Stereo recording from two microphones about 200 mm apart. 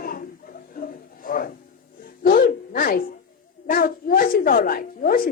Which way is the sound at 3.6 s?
45° left (ahead or behind).